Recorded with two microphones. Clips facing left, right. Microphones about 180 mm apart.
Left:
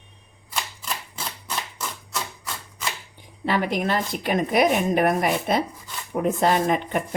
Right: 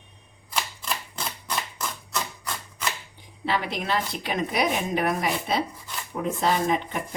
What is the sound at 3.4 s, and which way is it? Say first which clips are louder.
A woman's voice: left 4 dB; 45° left (ahead or behind).